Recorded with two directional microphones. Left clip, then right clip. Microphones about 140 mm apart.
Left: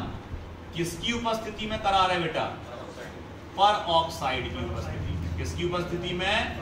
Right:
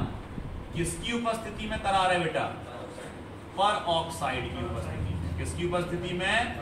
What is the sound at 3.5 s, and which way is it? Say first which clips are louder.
Speech: left 4 dB; 10° right (ahead or behind).